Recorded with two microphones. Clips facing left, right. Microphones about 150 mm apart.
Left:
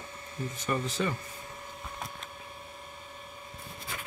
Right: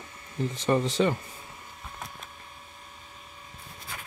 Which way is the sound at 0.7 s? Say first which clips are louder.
Right 7 dB; 35° right (ahead or behind).